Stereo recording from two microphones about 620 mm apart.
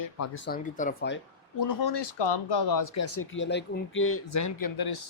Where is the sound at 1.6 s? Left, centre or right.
Left.